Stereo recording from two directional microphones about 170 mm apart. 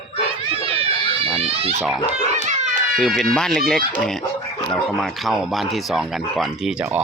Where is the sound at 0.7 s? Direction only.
35° right (ahead or behind).